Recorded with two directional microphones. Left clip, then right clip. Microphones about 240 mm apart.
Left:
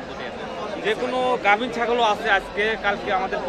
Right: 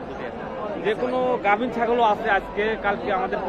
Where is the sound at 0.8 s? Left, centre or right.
Centre.